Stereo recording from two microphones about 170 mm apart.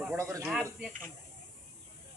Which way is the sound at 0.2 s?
20° right (ahead or behind).